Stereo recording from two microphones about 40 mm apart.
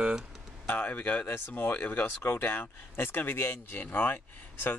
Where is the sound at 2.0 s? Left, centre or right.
Left.